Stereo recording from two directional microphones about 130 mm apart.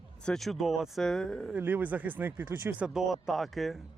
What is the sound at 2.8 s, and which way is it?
Speech, 5° right (ahead or behind).